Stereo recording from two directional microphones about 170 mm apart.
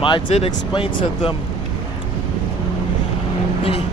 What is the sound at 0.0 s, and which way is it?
Speech, 30° left (ahead or behind).